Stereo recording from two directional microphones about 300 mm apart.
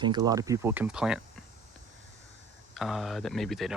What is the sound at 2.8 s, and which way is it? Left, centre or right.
Speech, centre.